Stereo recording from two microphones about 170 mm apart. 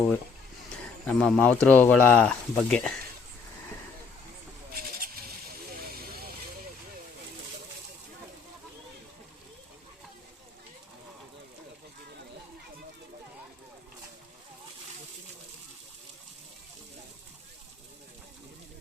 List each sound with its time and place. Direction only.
1.0 s speech: 10° left (ahead or behind)
4.7 s vehicle: 60° right (ahead or behind)